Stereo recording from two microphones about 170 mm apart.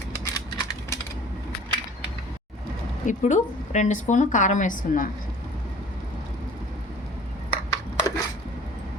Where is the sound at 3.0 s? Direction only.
45° left (ahead or behind).